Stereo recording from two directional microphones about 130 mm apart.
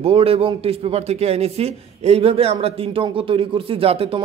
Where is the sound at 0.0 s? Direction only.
45° right (ahead or behind).